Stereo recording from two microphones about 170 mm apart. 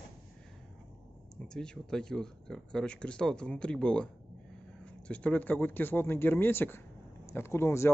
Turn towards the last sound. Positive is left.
turn(degrees=15)  # may be behind; listen again after turning